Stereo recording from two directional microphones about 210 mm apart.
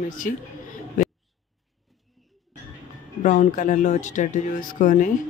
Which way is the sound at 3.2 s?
35° left (ahead or behind).